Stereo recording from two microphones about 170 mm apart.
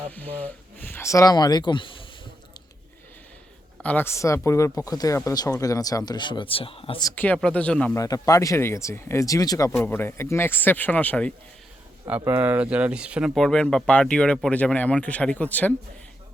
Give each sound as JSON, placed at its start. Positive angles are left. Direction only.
{"t": 0.1, "sound": "speech", "side_deg": 10}
{"t": 3.8, "sound": "speech", "side_deg": 10}
{"t": 7.0, "sound": "speech", "side_deg": 10}
{"t": 7.9, "sound": "speech", "side_deg": 20}
{"t": 12.0, "sound": "speech", "side_deg": -10}